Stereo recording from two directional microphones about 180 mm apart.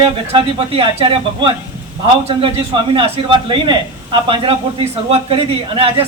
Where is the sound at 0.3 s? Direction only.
30° right (ahead or behind).